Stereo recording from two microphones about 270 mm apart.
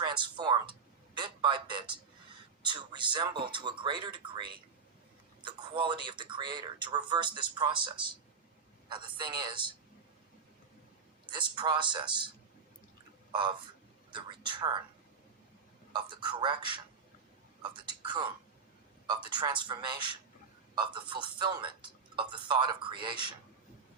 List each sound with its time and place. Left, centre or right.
0.0 s a sound: centre
2.6 s speech: centre
5.4 s speech: centre
11.3 s speech: centre
13.3 s speech: centre
15.9 s speech: centre